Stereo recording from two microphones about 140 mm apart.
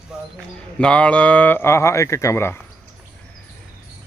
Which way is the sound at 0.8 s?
5° left (ahead or behind).